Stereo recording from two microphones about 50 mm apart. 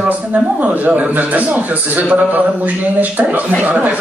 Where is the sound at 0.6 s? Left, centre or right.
Right.